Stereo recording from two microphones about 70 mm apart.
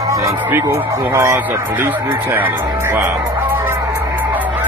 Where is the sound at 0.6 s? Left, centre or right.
Right.